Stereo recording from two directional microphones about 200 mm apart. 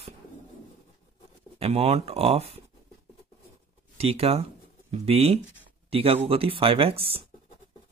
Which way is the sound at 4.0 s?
30° right (ahead or behind).